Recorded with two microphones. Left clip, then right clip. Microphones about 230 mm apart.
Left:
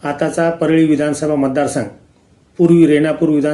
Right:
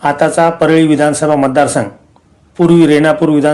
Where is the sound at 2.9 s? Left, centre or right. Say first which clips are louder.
Right 4 dB; centre.